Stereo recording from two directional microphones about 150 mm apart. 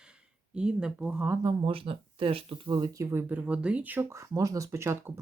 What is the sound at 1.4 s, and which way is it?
Speech, 35° right (ahead or behind).